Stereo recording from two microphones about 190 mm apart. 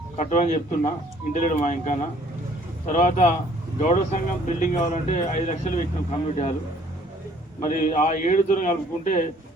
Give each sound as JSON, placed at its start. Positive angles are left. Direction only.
{"t": 0.2, "sound": "speech", "side_deg": 40}
{"t": 7.6, "sound": "a man's voice", "side_deg": 40}